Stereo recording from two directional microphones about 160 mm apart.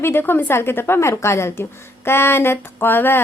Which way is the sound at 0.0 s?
15° left (ahead or behind).